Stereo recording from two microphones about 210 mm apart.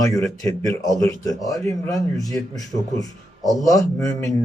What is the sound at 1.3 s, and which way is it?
A man's voice, 15° left (ahead or behind).